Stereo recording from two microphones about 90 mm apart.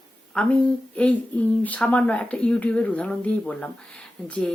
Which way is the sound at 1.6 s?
15° left (ahead or behind).